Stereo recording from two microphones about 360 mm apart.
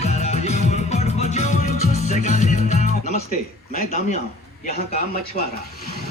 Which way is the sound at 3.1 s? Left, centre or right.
Left.